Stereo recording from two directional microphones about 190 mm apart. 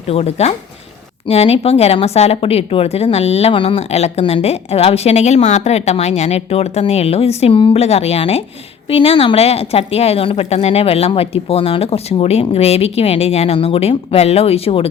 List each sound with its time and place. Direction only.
0.1 s speech: 35° left (ahead or behind)